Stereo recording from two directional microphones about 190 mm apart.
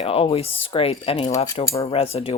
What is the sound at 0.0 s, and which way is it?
Speech, 30° left (ahead or behind).